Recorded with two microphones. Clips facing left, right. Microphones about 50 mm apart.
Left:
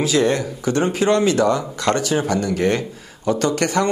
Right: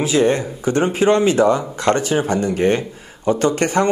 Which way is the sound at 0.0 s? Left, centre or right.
Right.